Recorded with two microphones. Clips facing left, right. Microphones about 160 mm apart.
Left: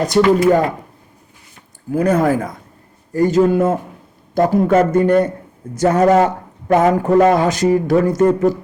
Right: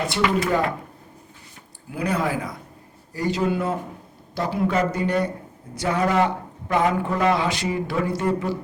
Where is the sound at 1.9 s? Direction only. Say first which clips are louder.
Left 10 dB; 45° left (ahead or behind).